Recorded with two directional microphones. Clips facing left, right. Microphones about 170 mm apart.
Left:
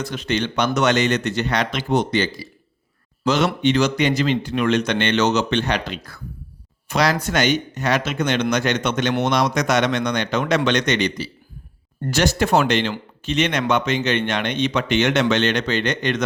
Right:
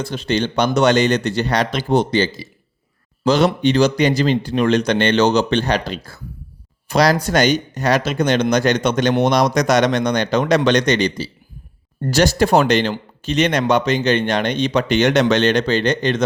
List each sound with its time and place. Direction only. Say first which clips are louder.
0.0 s speech: right 3 dB; 30° right (ahead or behind)